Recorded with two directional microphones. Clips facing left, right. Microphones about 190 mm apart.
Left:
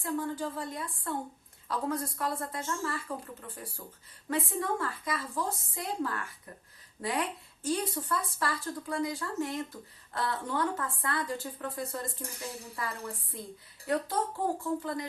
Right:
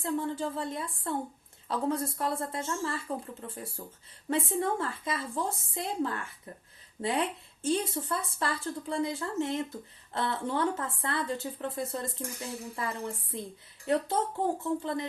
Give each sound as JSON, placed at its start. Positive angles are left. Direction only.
{"t": 0.0, "sound": "speech", "side_deg": -25}